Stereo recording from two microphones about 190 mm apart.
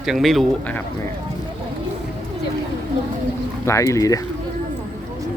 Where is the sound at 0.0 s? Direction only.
Centre (ahead or behind).